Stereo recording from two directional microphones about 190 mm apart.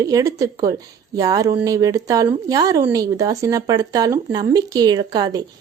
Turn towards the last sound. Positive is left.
turn(degrees=-20)  # may be behind; listen again after turning